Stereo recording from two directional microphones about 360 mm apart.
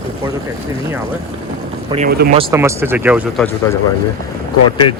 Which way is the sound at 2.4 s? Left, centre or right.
Centre.